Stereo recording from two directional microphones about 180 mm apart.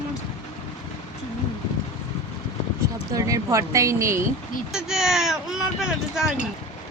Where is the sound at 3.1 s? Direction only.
15° right (ahead or behind).